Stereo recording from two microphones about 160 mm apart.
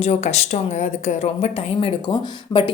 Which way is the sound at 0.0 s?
40° left (ahead or behind).